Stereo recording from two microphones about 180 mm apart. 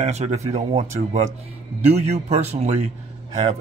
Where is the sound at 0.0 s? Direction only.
40° right (ahead or behind).